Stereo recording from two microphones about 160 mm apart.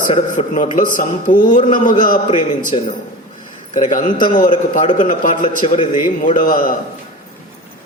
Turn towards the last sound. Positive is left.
turn(degrees=60)  # may be behind; listen again after turning